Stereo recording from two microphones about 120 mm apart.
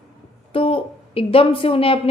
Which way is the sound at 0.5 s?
50° left (ahead or behind).